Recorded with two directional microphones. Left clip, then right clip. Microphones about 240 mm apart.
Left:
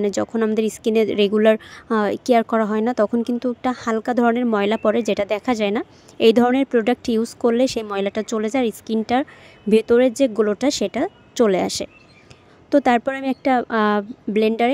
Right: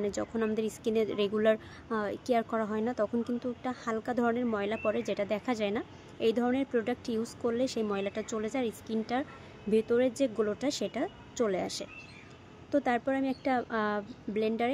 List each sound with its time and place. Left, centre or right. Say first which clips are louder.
0.0 s speech: left 11 dB; left